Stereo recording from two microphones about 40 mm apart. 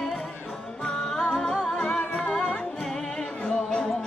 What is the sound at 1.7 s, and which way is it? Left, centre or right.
Music, left.